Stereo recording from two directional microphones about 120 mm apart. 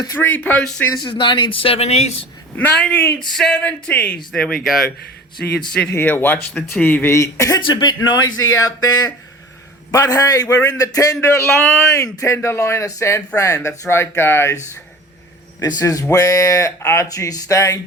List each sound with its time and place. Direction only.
0.2 s speech: 15° left (ahead or behind)
1.0 s speech: 40° left (ahead or behind); by 2.1 s 65° left (ahead or behind)
2.6 s speech: 15° left (ahead or behind)
3.2 s speech: 5° left (ahead or behind); by 7.6 s 25° left (ahead or behind)
7.6 s a man's voice: 40° left (ahead or behind); by 14.6 s 20° left (ahead or behind)
15.6 s a man's voice: 30° left (ahead or behind)